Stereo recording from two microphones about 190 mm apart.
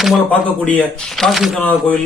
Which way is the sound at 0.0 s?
Centre (ahead or behind).